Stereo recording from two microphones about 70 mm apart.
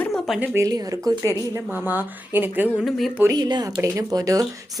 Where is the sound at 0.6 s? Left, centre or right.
Right.